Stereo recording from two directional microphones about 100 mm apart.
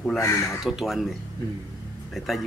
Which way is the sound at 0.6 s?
5° right (ahead or behind).